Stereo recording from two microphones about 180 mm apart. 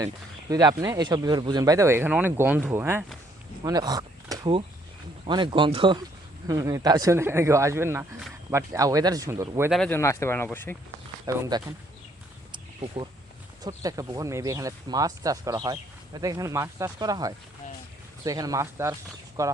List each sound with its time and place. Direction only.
0.5 s speech: 20° right (ahead or behind)
9.6 s speech: centre (ahead or behind)
9.9 s speech: 15° left (ahead or behind)
11.3 s speech: 20° right (ahead or behind)
12.5 s a sound: 30° right (ahead or behind)
13.6 s speech: 20° right (ahead or behind)